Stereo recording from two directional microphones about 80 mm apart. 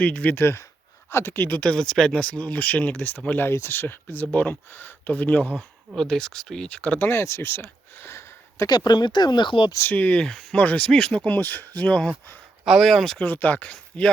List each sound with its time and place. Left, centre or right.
0.0 s speech: centre
1.5 s speech: centre
3.3 s speech: left; by 7.1 s centre
7.1 s speech: left
8.7 s speech: left
9.9 s speech: centre
11.3 s speech: left
12.6 s speech: centre
13.1 s speech: centre